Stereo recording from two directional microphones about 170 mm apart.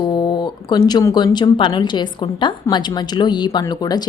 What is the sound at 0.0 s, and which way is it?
A woman's voice, 25° left (ahead or behind).